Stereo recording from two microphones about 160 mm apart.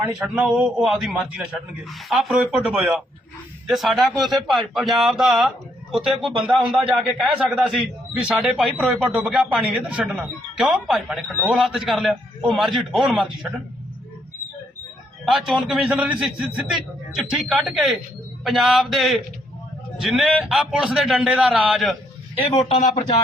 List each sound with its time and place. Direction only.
0.2 s a man's voice: 5° right (ahead or behind)
15.2 s a man's voice: centre (ahead or behind)
22.4 s a man's voice: 35° left (ahead or behind)